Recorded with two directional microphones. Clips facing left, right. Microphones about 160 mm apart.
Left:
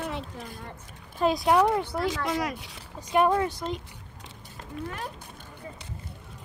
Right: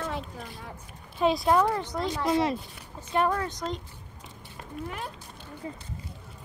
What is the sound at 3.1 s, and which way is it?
Speech, 20° left (ahead or behind).